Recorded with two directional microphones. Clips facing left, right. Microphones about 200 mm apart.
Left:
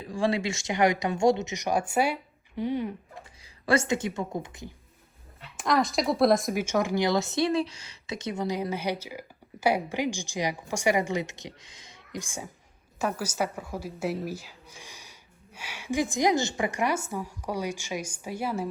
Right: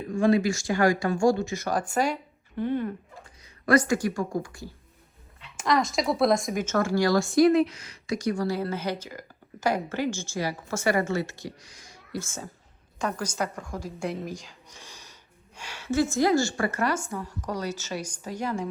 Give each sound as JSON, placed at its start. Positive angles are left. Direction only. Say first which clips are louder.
{"t": 0.0, "sound": "speech", "louder": "right 5 dB", "side_deg": 30}
{"t": 3.4, "sound": "a woman's voice", "louder": "right 3 dB", "side_deg": 30}
{"t": 5.5, "sound": "speech", "louder": "even", "side_deg": 0}